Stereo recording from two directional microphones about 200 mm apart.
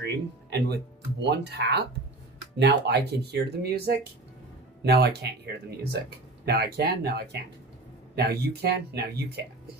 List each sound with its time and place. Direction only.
0.0 s music: 55° right (ahead or behind)
1.2 s speech: 60° right (ahead or behind)